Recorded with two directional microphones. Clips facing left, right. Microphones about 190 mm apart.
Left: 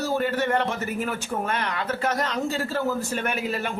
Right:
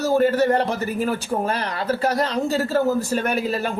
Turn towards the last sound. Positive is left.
turn(degrees=-35)  # may be behind; listen again after turning